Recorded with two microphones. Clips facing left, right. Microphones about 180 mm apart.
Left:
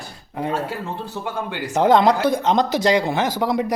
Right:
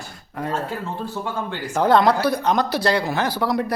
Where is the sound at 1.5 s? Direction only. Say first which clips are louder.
Left 2 dB; 15° left (ahead or behind).